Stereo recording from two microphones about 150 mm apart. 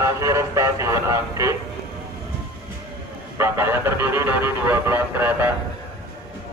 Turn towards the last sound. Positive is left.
turn(degrees=-15)  # may be behind; listen again after turning